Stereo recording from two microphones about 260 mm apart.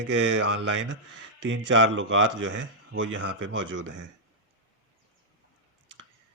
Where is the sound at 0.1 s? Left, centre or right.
Right.